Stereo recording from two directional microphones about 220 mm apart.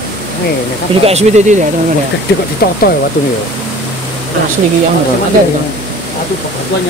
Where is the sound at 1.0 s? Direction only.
30° right (ahead or behind).